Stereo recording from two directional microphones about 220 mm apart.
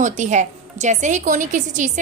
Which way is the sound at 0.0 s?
35° right (ahead or behind).